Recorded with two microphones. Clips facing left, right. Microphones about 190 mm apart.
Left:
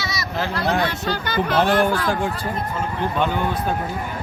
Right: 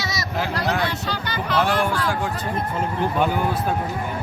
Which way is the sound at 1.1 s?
50° left (ahead or behind).